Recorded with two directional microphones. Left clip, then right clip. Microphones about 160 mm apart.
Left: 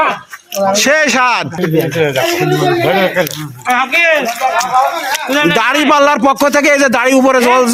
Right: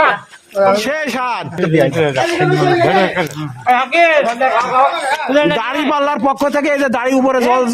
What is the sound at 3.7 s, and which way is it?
Speech, 30° right (ahead or behind).